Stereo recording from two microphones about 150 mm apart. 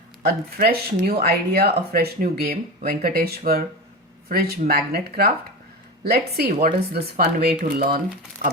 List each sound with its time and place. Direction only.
0.3 s speech: 90° right
7.6 s speech: 80° right